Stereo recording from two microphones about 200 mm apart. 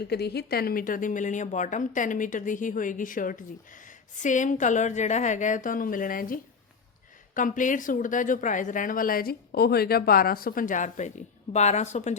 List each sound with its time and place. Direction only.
0.1 s a woman's voice: 55° left (ahead or behind); by 12.1 s 35° left (ahead or behind)